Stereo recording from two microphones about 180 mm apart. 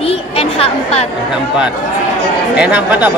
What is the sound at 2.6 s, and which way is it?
Speech, 5° right (ahead or behind).